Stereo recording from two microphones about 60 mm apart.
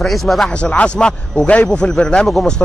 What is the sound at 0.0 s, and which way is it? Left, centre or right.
Speech, centre.